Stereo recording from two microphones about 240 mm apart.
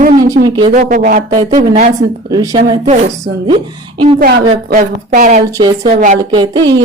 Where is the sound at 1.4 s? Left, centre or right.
Right.